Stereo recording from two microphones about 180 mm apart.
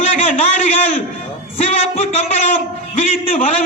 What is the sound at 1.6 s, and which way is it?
A man's voice, 35° left (ahead or behind).